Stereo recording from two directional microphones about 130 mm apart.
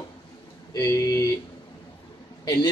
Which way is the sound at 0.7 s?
30° left (ahead or behind).